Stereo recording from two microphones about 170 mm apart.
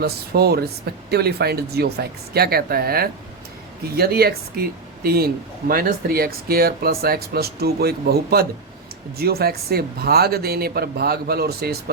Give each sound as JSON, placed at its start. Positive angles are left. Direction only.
{"t": 0.0, "sound": "speech", "side_deg": -65}